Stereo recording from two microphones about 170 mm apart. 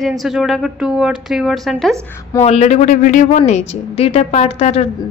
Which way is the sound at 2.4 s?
40° left (ahead or behind).